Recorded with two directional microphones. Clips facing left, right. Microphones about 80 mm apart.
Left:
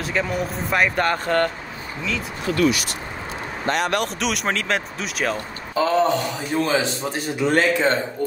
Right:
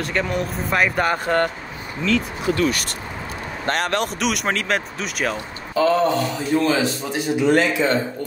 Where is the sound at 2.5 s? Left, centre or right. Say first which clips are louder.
Left 2 dB; right.